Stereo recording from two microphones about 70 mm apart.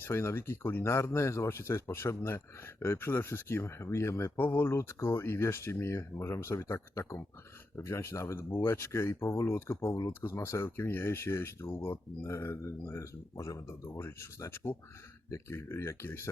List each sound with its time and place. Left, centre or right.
0.0 s speech: left